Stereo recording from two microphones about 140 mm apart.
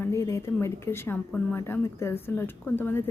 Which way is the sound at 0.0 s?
20° left (ahead or behind).